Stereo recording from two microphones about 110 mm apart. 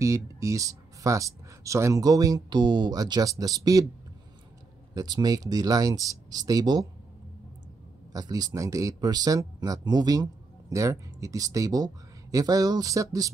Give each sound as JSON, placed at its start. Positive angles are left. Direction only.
{"t": 0.0, "sound": "speech", "side_deg": -30}
{"t": 4.9, "sound": "speech", "side_deg": -35}
{"t": 8.1, "sound": "speech", "side_deg": -35}